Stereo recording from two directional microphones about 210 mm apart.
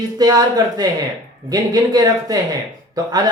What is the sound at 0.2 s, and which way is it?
Speech, 20° right (ahead or behind).